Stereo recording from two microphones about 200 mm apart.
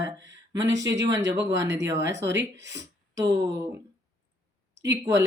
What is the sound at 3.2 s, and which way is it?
Speech, 15° right (ahead or behind).